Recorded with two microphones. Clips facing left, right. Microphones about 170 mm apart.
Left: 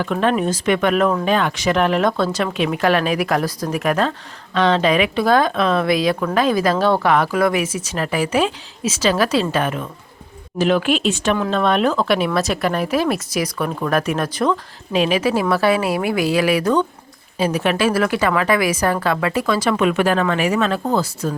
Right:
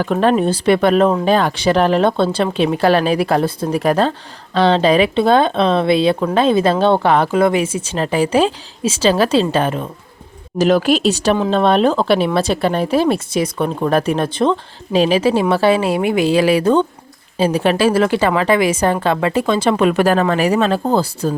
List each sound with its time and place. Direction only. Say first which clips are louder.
0.0 s speech: right 4 dB; 35° right (ahead or behind)